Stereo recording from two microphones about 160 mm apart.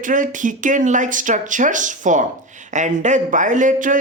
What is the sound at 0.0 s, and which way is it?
Speech, 55° right (ahead or behind).